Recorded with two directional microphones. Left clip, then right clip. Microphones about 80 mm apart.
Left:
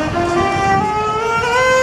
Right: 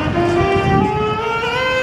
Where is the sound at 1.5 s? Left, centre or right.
Left.